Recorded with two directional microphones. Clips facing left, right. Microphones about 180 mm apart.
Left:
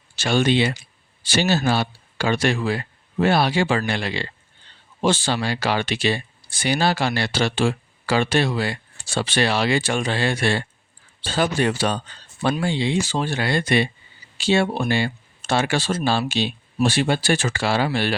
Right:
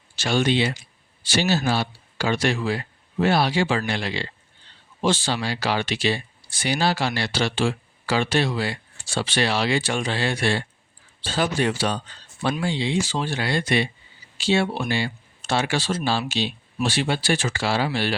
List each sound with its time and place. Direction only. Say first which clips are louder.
0.2 s speech: left 2 dB; 55° left (ahead or behind)